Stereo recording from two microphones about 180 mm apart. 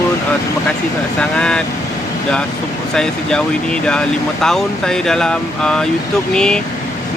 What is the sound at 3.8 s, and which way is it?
Speech, 5° left (ahead or behind).